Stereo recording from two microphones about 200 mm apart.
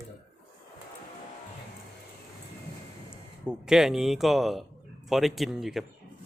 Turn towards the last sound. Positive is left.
turn(degrees=0)  # may be behind; listen again after turning